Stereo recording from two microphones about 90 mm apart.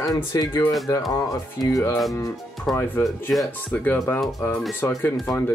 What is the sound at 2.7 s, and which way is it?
Speech, 5° left (ahead or behind).